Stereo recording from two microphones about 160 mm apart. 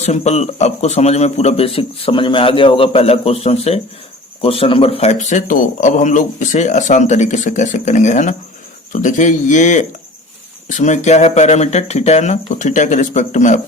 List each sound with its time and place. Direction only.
0.0 s a man's voice: 45° left (ahead or behind)